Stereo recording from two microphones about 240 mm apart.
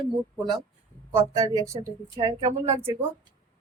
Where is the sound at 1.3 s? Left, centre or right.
Centre.